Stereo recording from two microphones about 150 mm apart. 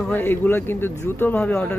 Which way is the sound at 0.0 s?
15° left (ahead or behind).